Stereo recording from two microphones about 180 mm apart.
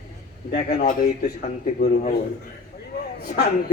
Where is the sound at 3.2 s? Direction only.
60° left (ahead or behind).